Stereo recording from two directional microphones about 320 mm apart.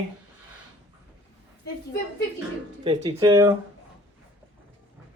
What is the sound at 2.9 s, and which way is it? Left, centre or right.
Speech, centre.